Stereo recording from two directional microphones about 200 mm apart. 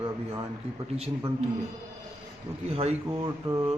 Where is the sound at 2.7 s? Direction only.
30° right (ahead or behind).